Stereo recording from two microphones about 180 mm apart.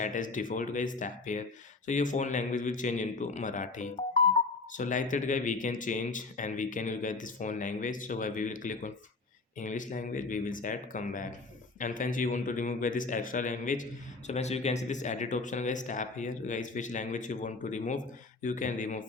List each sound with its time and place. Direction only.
0.0 s speech: 45° left (ahead or behind)